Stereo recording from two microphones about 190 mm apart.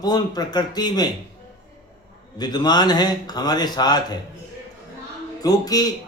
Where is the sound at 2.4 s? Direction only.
20° left (ahead or behind).